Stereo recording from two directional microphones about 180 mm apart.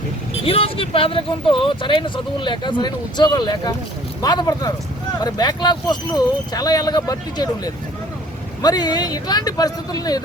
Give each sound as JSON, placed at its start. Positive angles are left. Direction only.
{"t": 0.4, "sound": "speech", "side_deg": 30}